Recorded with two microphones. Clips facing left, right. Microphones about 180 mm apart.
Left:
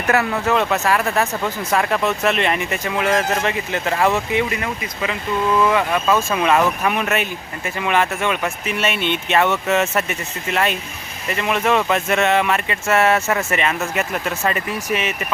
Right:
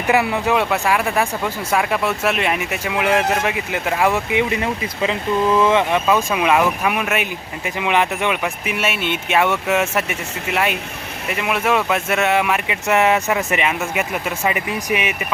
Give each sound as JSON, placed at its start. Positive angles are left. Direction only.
{"t": 0.1, "sound": "speech", "side_deg": -15}